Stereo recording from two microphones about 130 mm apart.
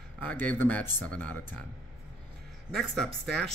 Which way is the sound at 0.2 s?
10° left (ahead or behind).